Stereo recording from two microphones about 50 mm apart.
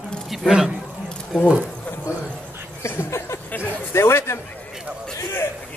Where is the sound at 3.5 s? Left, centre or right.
Left.